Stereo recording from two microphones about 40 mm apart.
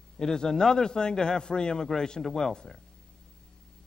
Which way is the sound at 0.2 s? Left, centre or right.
Centre.